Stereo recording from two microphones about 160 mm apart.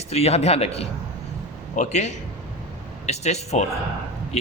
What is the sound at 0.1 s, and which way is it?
A man's voice, 40° left (ahead or behind).